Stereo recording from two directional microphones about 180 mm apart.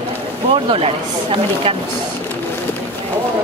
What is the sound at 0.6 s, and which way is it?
Speech, 30° right (ahead or behind).